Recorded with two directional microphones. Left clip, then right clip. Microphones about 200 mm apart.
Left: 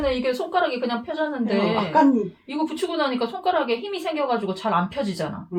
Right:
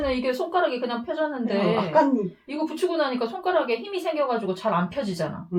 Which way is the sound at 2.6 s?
10° right (ahead or behind).